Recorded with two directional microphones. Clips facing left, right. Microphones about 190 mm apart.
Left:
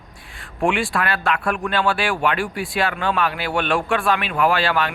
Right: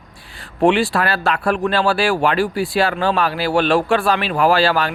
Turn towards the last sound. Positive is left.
turn(degrees=-35)  # may be behind; listen again after turning